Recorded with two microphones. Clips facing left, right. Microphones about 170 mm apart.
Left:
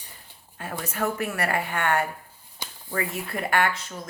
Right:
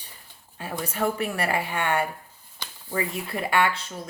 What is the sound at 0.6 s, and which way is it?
Speech, 25° right (ahead or behind).